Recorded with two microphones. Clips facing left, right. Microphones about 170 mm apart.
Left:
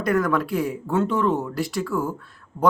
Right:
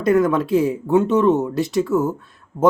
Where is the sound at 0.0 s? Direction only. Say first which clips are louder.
Right 5 dB; 20° right (ahead or behind).